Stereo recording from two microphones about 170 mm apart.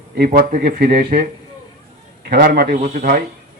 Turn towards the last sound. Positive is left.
turn(degrees=-50)  # may be behind; listen again after turning